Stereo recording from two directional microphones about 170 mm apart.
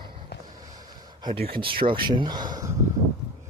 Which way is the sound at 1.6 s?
30° right (ahead or behind).